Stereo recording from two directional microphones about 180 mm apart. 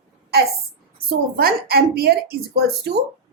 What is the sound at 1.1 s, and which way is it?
Speech, 60° right (ahead or behind).